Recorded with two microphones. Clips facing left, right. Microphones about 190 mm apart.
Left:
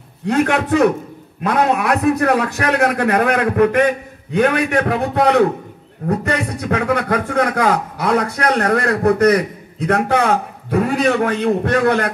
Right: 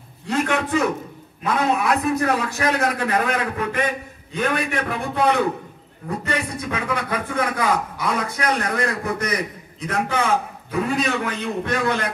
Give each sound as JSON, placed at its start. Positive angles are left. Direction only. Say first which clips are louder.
{"t": 0.3, "sound": "a man's voice", "louder": "left 6 dB", "side_deg": 65}